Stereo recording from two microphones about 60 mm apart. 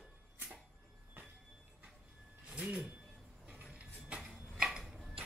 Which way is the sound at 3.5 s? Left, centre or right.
Right.